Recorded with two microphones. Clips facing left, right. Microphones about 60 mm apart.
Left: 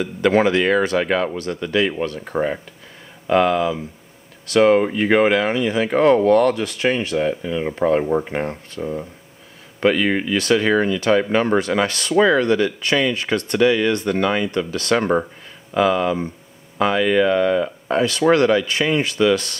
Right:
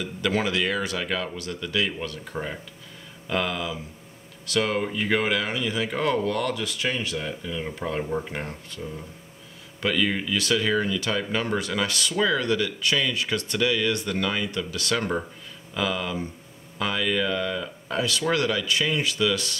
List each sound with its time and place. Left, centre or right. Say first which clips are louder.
0.0 s speech: left 9 dB; left